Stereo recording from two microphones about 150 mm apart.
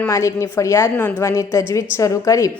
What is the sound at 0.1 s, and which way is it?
A woman's voice, 20° left (ahead or behind).